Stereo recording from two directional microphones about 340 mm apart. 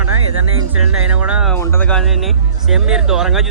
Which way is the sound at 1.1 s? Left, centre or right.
Centre.